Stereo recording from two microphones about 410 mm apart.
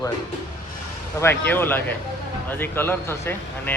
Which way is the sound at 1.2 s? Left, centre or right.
Centre.